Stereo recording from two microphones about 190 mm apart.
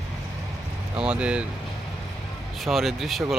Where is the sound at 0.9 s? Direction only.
5° right (ahead or behind).